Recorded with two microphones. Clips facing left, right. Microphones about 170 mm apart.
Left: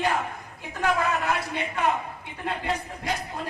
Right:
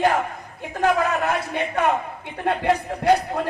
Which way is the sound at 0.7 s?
45° right (ahead or behind).